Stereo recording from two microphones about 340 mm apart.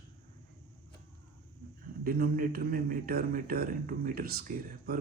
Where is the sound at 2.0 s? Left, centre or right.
Right.